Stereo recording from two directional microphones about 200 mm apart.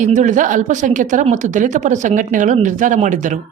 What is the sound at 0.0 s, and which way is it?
Speech, 40° right (ahead or behind).